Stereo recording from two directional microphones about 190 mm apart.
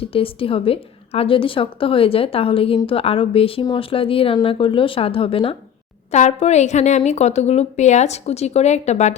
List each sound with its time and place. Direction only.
0.0 s a woman's voice: 30° left (ahead or behind)